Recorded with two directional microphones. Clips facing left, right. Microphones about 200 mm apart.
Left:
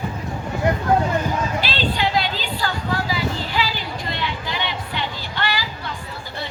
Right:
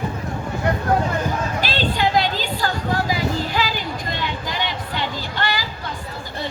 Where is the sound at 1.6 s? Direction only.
45° right (ahead or behind).